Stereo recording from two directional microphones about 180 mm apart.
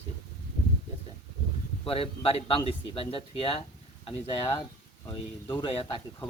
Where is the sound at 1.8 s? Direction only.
30° left (ahead or behind).